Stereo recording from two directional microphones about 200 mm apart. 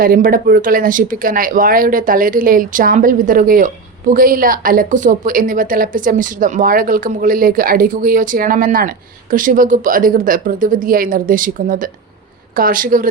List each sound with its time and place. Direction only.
0.0 s speech: 45° right (ahead or behind)